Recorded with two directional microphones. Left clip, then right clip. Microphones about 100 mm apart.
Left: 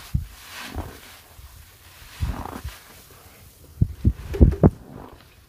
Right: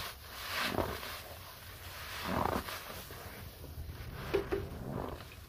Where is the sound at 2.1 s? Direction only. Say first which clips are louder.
Right 1 dB; centre (ahead or behind).